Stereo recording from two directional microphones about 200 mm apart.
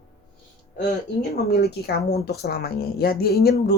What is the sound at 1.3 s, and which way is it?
A woman's voice, 55° left (ahead or behind).